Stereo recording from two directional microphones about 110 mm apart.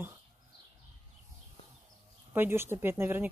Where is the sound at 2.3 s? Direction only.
20° right (ahead or behind).